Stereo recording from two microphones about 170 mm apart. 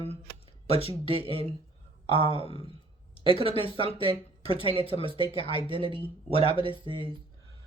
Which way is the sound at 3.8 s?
30° right (ahead or behind).